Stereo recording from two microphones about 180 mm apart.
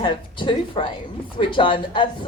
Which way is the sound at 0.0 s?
30° left (ahead or behind).